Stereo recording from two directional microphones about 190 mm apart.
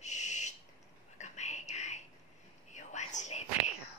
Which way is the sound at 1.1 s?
35° left (ahead or behind).